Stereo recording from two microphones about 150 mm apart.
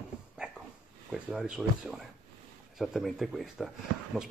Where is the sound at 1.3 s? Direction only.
5° right (ahead or behind).